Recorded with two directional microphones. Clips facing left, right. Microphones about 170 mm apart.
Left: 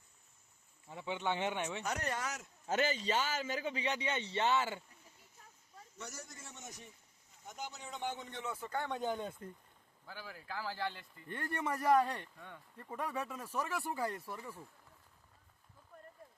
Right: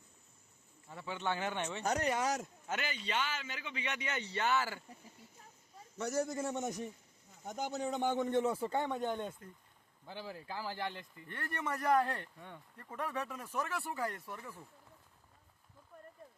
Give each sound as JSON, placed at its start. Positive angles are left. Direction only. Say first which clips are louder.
{"t": 0.9, "sound": "speech", "louder": "left 1 dB", "side_deg": 15}
{"t": 2.2, "sound": "speech", "louder": "right 8 dB", "side_deg": -35}
{"t": 2.6, "sound": "a man's voice", "louder": "left 7 dB", "side_deg": 40}
{"t": 6.0, "sound": "a man's voice", "louder": "right 15 dB", "side_deg": -55}
{"t": 8.4, "sound": "speech", "louder": "right 6 dB", "side_deg": -30}
{"t": 8.9, "sound": "speech", "louder": "right 1 dB", "side_deg": 0}
{"t": 10.1, "sound": "speech", "louder": "right 3 dB", "side_deg": -25}
{"t": 11.3, "sound": "speech", "louder": "left 2 dB", "side_deg": 15}